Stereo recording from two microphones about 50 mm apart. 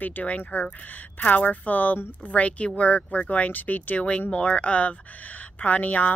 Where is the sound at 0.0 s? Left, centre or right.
Left.